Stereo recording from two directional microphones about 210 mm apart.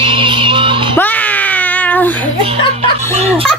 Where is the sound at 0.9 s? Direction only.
10° left (ahead or behind).